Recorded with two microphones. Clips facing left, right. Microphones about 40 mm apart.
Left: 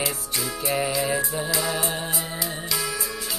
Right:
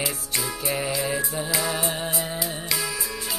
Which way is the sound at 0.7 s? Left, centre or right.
Centre.